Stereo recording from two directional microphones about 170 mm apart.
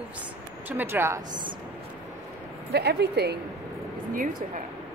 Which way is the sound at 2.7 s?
75° right (ahead or behind).